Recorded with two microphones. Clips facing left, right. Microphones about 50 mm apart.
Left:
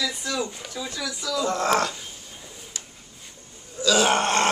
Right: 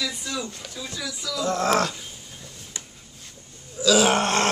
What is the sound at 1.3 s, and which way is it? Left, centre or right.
Speech, centre.